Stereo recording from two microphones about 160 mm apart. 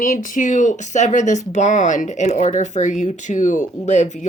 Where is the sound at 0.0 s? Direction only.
55° left (ahead or behind).